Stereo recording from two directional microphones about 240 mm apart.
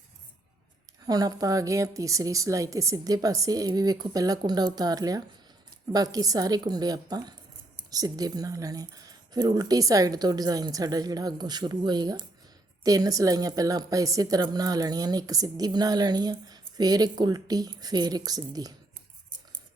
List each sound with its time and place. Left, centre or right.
1.0 s a woman's voice: centre